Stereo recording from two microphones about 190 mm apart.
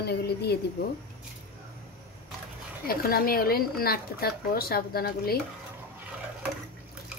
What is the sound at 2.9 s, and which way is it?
A woman's voice, 50° left (ahead or behind).